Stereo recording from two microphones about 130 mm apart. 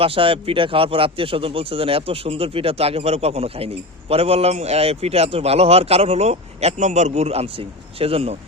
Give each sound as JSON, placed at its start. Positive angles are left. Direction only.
{"t": 0.0, "sound": "speech", "side_deg": -45}